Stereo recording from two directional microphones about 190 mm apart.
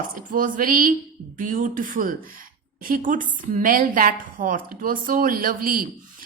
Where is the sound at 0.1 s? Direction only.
45° right (ahead or behind).